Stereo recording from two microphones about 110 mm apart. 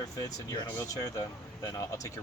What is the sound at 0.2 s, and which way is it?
Speech, 30° left (ahead or behind).